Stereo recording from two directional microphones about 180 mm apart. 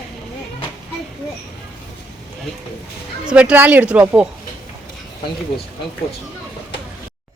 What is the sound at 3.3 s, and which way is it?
Speech, 5° right (ahead or behind).